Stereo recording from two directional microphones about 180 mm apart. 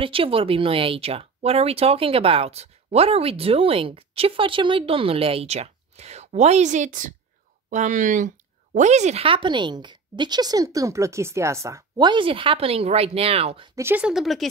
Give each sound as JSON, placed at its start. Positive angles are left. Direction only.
{"t": 0.0, "sound": "a woman's voice", "side_deg": -30}
{"t": 13.7, "sound": "speech", "side_deg": -10}